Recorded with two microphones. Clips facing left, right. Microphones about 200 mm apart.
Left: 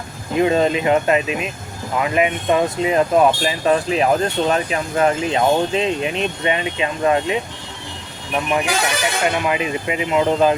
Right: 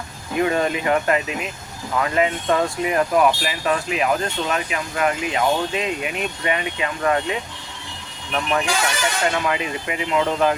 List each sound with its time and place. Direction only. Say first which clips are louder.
0.3 s speech: left 4 dB; 25° left (ahead or behind)